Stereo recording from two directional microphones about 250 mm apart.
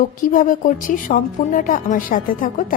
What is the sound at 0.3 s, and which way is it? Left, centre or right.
A woman's voice, left.